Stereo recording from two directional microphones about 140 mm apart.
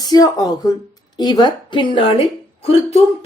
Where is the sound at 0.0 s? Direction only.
25° left (ahead or behind).